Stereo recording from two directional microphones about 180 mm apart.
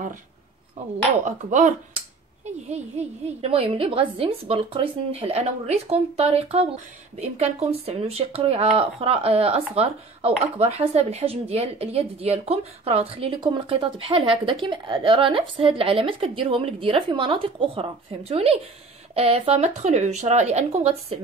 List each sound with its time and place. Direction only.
1.2 s dishes: 45° right (ahead or behind)
2.7 s speech: 35° right (ahead or behind)